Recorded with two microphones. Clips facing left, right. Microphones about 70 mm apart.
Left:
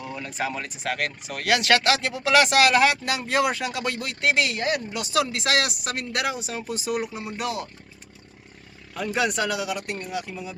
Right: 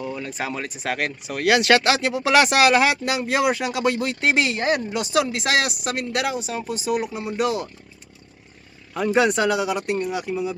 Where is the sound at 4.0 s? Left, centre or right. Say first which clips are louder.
Right 3 dB; right; by 7.7 s centre.